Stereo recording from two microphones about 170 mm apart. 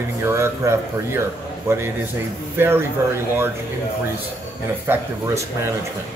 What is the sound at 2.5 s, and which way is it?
Speech, 15° right (ahead or behind).